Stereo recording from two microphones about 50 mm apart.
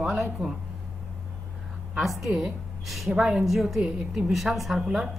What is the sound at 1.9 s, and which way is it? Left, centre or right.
A woman's voice, centre.